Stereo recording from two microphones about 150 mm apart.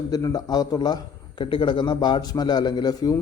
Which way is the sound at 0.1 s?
25° left (ahead or behind).